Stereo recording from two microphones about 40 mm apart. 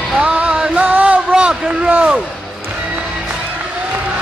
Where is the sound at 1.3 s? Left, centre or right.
Right.